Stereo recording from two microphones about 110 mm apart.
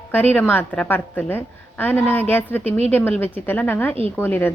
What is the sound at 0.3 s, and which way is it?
A woman's voice, 15° left (ahead or behind).